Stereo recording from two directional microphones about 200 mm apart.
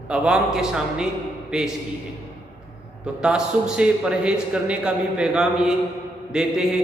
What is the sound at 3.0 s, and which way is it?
A man's voice, 5° right (ahead or behind).